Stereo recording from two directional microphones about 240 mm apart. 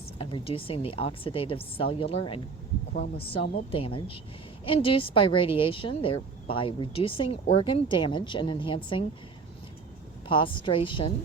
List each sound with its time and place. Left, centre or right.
0.2 s a woman's voice: left
3.7 s a woman's voice: left
10.2 s a woman's voice: left